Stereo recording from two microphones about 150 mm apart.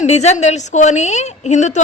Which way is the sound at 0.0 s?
45° left (ahead or behind).